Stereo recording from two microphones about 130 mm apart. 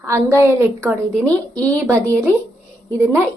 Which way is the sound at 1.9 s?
15° right (ahead or behind).